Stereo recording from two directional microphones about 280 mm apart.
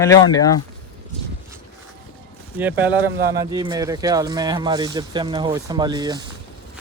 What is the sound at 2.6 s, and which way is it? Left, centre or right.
Speech, centre.